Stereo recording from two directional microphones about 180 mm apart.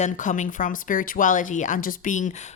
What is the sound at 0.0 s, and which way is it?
Speech, 45° left (ahead or behind).